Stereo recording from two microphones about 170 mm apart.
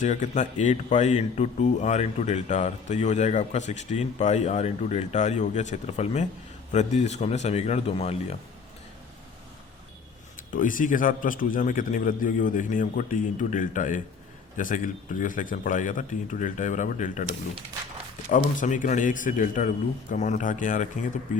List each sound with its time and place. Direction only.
0.0 s speech: 45° left (ahead or behind)
10.3 s speech: 50° left (ahead or behind)
18.3 s speech: 50° left (ahead or behind)